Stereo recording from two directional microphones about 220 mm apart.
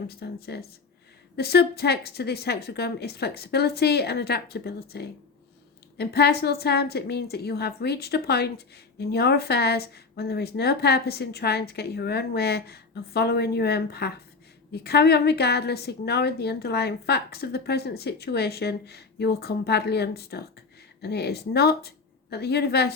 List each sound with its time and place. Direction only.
0.1 s a woman's voice: 45° left (ahead or behind)